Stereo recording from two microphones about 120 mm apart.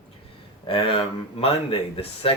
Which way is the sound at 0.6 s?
50° left (ahead or behind).